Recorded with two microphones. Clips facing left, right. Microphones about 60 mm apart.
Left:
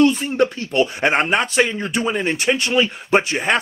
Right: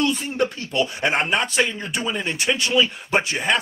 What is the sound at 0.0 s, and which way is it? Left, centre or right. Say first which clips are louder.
A man's voice: left 6 dB; left.